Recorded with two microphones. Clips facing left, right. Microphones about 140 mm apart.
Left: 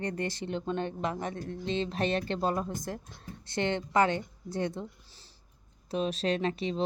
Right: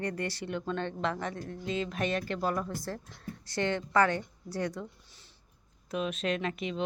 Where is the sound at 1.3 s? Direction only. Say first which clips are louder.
Left 2 dB; 40° right (ahead or behind).